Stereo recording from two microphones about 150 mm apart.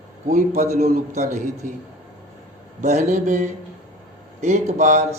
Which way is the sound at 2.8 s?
50° right (ahead or behind).